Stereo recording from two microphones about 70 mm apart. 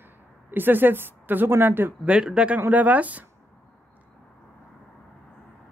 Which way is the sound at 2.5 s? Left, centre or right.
Right.